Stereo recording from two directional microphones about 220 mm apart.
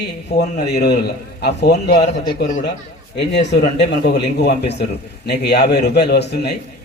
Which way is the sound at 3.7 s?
50° left (ahead or behind).